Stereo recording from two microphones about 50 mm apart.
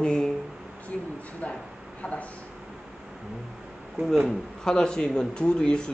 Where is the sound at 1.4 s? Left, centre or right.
Left.